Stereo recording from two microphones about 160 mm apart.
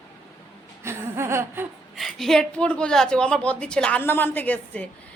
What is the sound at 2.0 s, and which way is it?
A woman's voice, centre (ahead or behind).